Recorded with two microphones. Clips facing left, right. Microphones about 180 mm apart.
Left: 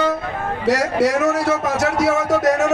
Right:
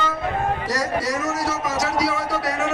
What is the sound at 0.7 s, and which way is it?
A man's voice, 70° left (ahead or behind).